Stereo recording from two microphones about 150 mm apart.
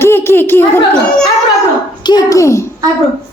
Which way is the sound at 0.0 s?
15° left (ahead or behind).